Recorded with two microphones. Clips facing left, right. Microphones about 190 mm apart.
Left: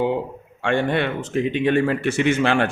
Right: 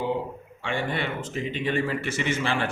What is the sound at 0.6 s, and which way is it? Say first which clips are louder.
Speech: left 8 dB; 60° left (ahead or behind).